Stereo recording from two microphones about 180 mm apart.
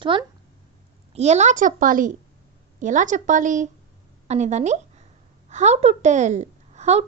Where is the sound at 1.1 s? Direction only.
40° right (ahead or behind).